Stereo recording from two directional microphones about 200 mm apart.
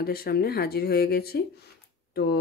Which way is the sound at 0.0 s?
50° left (ahead or behind).